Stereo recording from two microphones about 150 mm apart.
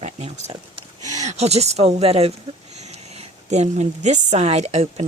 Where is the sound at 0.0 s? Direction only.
45° right (ahead or behind).